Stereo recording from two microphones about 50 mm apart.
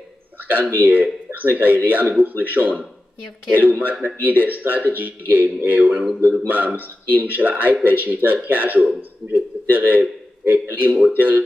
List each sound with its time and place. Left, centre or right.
0.4 s speech: right